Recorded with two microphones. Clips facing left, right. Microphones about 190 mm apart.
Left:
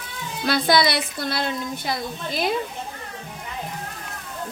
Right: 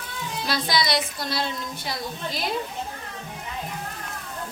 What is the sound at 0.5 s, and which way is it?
A woman's voice, 60° left (ahead or behind).